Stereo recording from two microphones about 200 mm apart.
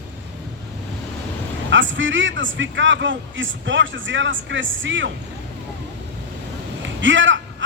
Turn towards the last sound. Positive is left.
turn(degrees=-70)  # may be behind; listen again after turning